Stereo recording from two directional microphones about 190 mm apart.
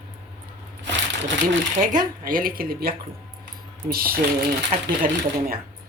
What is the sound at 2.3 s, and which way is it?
Speech, 50° right (ahead or behind).